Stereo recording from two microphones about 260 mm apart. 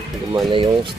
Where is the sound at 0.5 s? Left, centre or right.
Centre.